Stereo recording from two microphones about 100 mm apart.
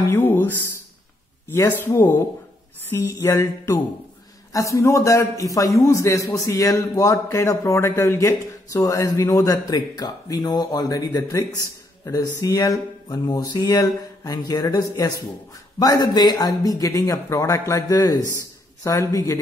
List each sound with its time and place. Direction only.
0.1 s speech: 20° left (ahead or behind)
1.5 s a woman's voice: 25° left (ahead or behind)